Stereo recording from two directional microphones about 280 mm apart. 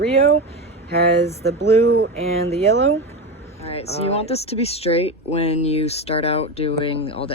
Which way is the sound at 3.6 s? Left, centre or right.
Left.